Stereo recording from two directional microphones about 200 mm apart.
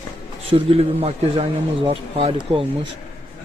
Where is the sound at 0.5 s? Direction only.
30° right (ahead or behind).